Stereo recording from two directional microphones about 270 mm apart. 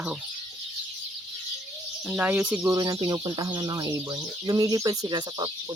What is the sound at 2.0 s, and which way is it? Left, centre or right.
Speech, centre.